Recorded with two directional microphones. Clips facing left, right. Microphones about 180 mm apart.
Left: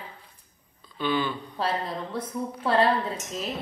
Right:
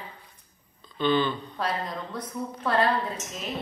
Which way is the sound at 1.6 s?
30° left (ahead or behind).